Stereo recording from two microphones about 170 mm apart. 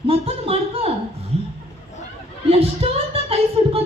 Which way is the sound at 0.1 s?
35° right (ahead or behind).